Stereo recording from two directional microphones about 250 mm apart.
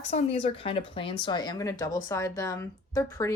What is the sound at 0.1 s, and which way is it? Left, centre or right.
A woman's voice, left.